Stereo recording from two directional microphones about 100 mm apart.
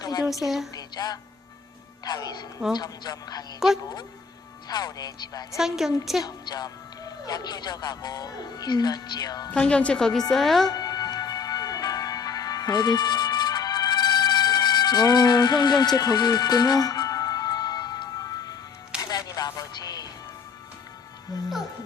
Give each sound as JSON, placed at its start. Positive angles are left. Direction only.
{"t": 0.0, "sound": "a sound", "side_deg": 40}
{"t": 0.4, "sound": "a woman's voice", "side_deg": 0}
{"t": 0.8, "sound": "a woman's voice", "side_deg": 40}
{"t": 3.6, "sound": "a woman's voice", "side_deg": -5}
{"t": 4.7, "sound": "speech", "side_deg": 40}
{"t": 5.5, "sound": "a woman's voice", "side_deg": -5}
{"t": 6.2, "sound": "speech", "side_deg": 40}
{"t": 9.5, "sound": "a woman's voice", "side_deg": 10}
{"t": 10.7, "sound": "music", "side_deg": 40}